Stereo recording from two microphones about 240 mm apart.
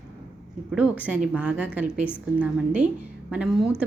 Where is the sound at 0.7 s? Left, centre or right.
Centre.